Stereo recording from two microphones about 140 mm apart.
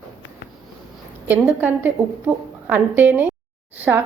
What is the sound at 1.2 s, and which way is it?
A woman's voice, 15° right (ahead or behind).